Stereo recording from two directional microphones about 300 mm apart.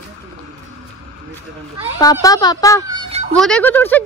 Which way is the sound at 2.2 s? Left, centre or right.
Centre.